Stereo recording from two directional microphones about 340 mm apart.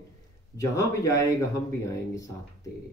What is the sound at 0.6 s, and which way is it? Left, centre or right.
Speech, centre.